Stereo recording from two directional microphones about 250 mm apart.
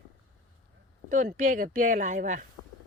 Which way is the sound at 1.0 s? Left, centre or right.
Right.